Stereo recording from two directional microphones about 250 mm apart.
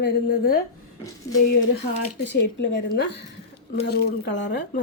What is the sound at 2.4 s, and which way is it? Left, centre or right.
A woman's voice, left.